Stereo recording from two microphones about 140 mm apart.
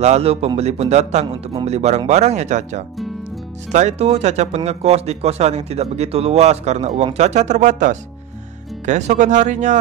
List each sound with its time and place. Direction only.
0.0 s speech: 50° right (ahead or behind)
1.2 s a man's voice: 35° right (ahead or behind)
1.7 s speech: 50° right (ahead or behind)